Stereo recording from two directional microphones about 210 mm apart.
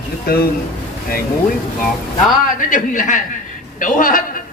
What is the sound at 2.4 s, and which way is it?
A man's voice, 40° left (ahead or behind).